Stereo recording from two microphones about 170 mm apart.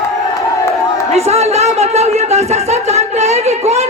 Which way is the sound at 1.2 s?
40° right (ahead or behind).